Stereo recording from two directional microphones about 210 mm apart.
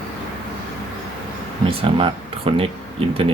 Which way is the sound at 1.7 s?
25° right (ahead or behind).